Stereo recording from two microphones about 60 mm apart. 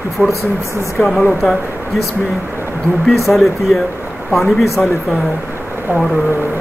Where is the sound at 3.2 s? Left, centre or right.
Centre.